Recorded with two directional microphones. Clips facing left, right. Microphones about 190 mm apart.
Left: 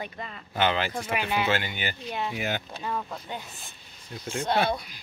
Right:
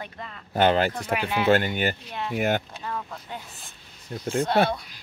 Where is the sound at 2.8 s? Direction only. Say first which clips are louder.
Left 1 dB; 10° left (ahead or behind).